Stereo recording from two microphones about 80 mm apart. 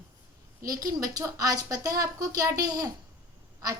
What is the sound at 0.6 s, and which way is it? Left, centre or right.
A woman's voice, right.